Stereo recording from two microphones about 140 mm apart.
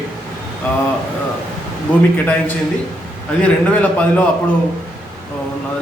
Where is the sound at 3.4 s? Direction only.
10° left (ahead or behind).